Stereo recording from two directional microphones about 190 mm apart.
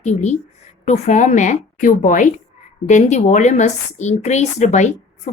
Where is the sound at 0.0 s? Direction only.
35° left (ahead or behind).